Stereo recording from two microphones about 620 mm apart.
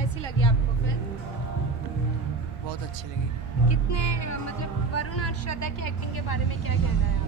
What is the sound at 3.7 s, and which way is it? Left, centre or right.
Speech, left.